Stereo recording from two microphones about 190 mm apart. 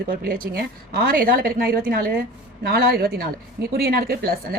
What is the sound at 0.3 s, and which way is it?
A woman's voice, 50° right (ahead or behind).